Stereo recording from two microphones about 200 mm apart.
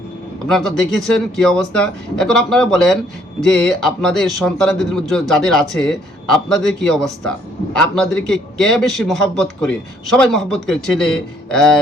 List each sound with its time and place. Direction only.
0.4 s a man's voice: centre (ahead or behind)
8.0 s a man's voice: centre (ahead or behind)